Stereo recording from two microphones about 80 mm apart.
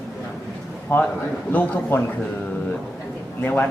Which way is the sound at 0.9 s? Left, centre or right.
Left.